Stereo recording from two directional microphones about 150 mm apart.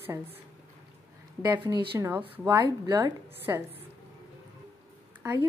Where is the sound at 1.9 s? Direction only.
20° right (ahead or behind).